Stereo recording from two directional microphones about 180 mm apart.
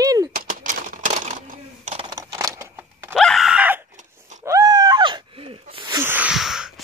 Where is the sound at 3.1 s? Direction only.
Centre (ahead or behind).